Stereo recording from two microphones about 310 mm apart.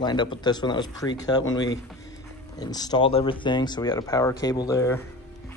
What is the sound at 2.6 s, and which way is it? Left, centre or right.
Speech, centre.